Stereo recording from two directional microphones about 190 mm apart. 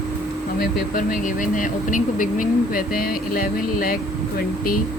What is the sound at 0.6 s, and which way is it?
Speech, 45° left (ahead or behind).